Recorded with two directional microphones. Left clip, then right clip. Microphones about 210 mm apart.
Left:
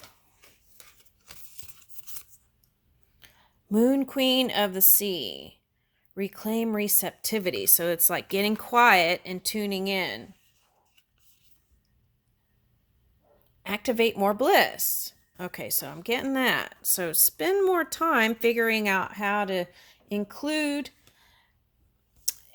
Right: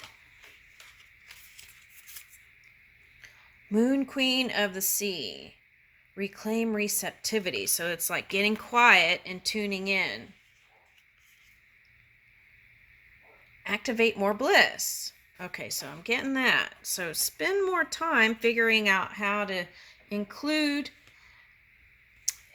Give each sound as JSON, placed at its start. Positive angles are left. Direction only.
{"t": 3.2, "sound": "a woman's voice", "side_deg": 50}
{"t": 13.6, "sound": "a woman's voice", "side_deg": 50}
{"t": 22.3, "sound": "a sound", "side_deg": 50}